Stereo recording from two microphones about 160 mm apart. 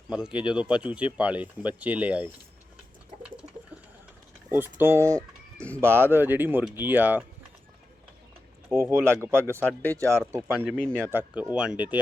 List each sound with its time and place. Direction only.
0.1 s speech: 5° right (ahead or behind)
3.2 s bird: 5° right (ahead or behind)
4.5 s speech: 15° right (ahead or behind)
5.5 s speech: 10° left (ahead or behind)
5.8 s speech: 15° right (ahead or behind)
8.7 s speech: 15° right (ahead or behind)
9.6 s speech: 10° left (ahead or behind)
10.0 s speech: 15° right (ahead or behind)